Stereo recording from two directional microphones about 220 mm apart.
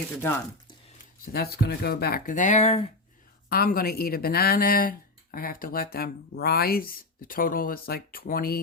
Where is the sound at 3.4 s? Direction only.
45° left (ahead or behind).